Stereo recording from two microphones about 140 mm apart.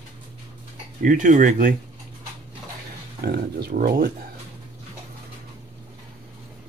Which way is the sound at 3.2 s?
90° right.